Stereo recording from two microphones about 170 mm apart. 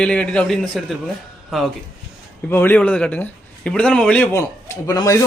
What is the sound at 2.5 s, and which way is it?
A man's voice, 10° left (ahead or behind).